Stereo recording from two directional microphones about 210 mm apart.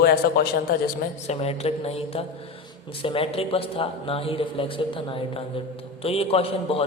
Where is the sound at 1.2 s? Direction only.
30° left (ahead or behind).